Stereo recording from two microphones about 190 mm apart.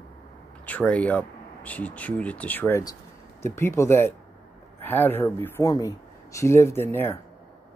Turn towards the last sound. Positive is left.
turn(degrees=10)  # may be behind; listen again after turning